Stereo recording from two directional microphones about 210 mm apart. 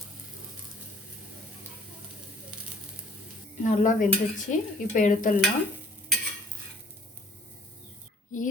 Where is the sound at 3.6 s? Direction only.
35° left (ahead or behind).